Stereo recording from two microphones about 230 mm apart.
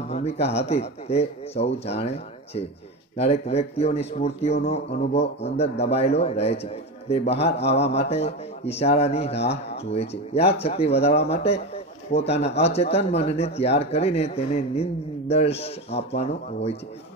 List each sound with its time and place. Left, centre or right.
0.1 s speech: left
9.3 s speech: left
9.8 s a man's voice: left